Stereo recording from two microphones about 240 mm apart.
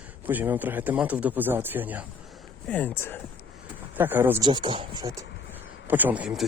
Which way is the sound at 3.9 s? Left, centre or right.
Centre.